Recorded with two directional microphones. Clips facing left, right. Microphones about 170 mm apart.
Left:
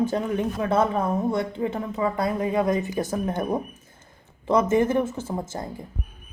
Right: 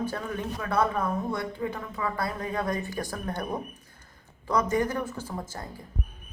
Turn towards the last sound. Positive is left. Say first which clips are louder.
# left 6 dB
turn(degrees=25)  # may be behind; listen again after turning